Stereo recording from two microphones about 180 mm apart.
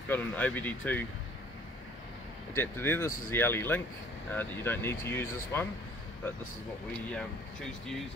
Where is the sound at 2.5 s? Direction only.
10° left (ahead or behind).